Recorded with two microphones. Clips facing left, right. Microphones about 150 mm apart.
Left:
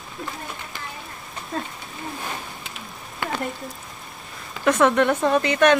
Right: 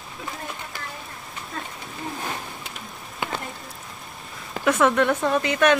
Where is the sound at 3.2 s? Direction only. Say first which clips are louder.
Left 2 dB; 20° right (ahead or behind).